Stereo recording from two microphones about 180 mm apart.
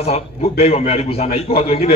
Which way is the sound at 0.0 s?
35° left (ahead or behind).